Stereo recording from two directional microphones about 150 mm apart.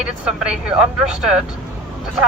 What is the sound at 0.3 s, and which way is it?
Speech, 5° right (ahead or behind).